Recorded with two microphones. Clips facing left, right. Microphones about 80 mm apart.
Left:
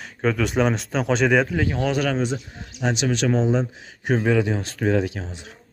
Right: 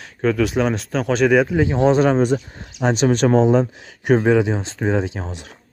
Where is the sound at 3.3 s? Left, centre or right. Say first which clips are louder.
Right 6 dB; right.